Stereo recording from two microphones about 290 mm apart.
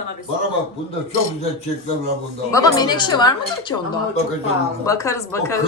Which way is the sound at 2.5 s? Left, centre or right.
Centre.